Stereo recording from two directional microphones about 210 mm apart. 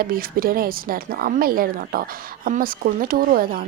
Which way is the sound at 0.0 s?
45° right (ahead or behind).